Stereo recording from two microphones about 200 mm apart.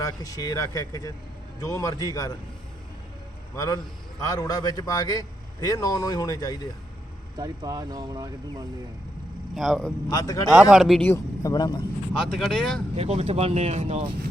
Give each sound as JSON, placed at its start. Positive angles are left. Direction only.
{"t": 0.0, "sound": "speech", "side_deg": 15}
{"t": 3.5, "sound": "a man's voice", "side_deg": 15}
{"t": 7.3, "sound": "speech", "side_deg": -15}
{"t": 9.6, "sound": "speech", "side_deg": 0}
{"t": 10.1, "sound": "speech", "side_deg": 15}
{"t": 10.5, "sound": "speech", "side_deg": -5}
{"t": 11.0, "sound": "a man's voice", "side_deg": 15}
{"t": 12.4, "sound": "speech", "side_deg": 0}
{"t": 13.0, "sound": "speech", "side_deg": -30}